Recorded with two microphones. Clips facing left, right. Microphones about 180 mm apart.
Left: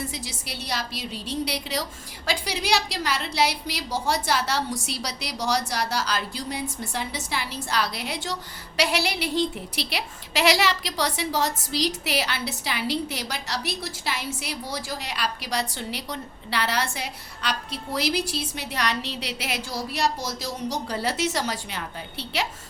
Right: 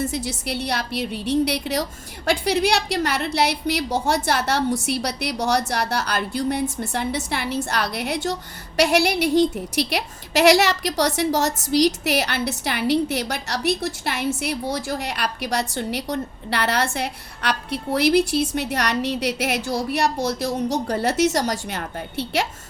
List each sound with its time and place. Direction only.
0.0 s a woman's voice: 55° right (ahead or behind)